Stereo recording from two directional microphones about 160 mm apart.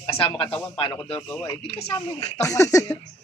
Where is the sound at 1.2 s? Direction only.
20° left (ahead or behind).